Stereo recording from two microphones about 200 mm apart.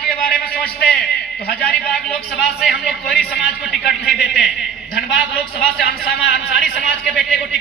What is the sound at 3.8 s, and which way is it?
Speech, 55° left (ahead or behind).